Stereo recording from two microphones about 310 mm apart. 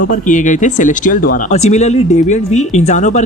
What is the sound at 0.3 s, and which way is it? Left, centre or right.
Speech, left.